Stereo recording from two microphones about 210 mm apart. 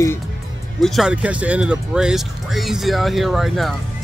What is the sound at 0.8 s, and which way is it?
Speech, centre (ahead or behind).